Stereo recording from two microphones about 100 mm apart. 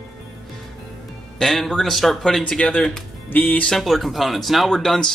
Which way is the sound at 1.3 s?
5° left (ahead or behind).